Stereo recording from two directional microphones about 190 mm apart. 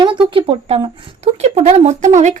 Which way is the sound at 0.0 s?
25° right (ahead or behind).